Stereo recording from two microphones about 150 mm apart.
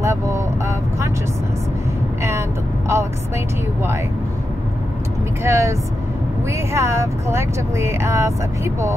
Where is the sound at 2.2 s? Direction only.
20° right (ahead or behind).